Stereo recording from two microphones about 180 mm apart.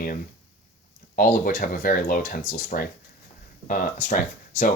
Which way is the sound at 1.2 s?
50° left (ahead or behind).